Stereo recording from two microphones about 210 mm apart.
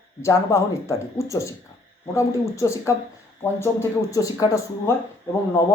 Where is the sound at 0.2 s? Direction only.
15° left (ahead or behind).